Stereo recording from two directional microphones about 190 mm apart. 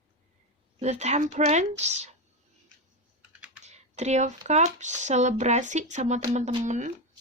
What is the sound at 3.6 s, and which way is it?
Speech, 35° right (ahead or behind).